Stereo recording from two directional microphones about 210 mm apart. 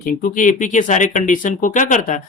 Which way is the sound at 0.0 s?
40° left (ahead or behind).